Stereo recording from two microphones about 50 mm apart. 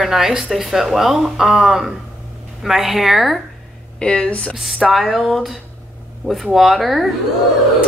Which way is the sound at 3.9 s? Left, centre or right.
Centre.